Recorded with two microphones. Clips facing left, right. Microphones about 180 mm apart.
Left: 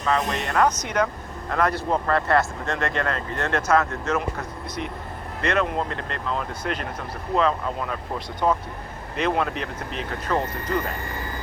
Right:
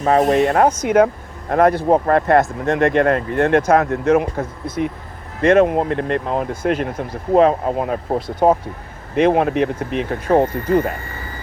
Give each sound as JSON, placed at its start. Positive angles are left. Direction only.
{"t": 0.0, "sound": "speech", "side_deg": -50}